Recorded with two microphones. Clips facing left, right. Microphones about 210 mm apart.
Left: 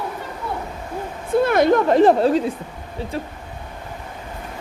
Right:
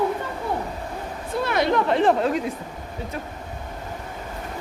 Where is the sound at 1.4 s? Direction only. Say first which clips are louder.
Left 5 dB; 50° left (ahead or behind); by 2.5 s 30° left (ahead or behind).